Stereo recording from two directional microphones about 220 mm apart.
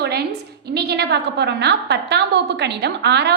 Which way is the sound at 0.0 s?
45° right (ahead or behind).